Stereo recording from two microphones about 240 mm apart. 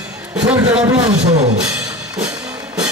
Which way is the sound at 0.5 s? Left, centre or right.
Centre.